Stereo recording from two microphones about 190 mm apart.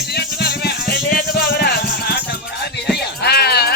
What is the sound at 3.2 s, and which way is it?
Music, 55° left (ahead or behind).